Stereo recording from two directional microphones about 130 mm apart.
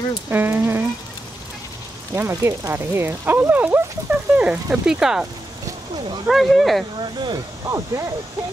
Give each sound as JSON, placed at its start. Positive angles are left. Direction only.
{"t": 0.3, "sound": "speech", "side_deg": -15}
{"t": 2.1, "sound": "speech", "side_deg": -20}
{"t": 6.2, "sound": "speech", "side_deg": 0}
{"t": 7.0, "sound": "speech", "side_deg": -35}